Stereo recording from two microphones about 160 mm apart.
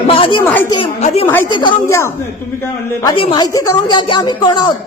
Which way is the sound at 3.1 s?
30° left (ahead or behind).